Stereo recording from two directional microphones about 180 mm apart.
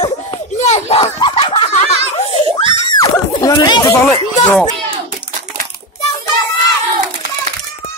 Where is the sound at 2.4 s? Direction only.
30° right (ahead or behind).